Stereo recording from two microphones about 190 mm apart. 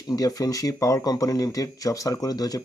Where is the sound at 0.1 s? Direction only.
20° left (ahead or behind).